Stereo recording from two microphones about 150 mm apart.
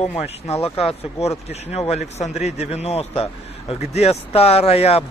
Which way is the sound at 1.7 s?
45° left (ahead or behind).